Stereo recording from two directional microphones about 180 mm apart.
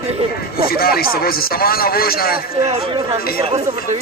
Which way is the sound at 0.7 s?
55° left (ahead or behind).